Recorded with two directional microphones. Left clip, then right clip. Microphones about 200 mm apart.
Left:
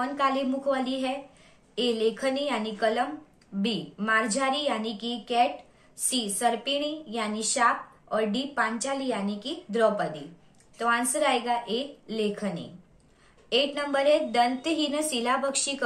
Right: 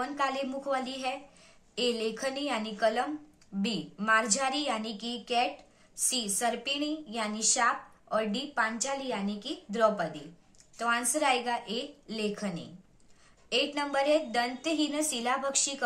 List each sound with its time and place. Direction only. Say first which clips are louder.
0.0 s a woman's voice: left 5 dB; 20° right (ahead or behind)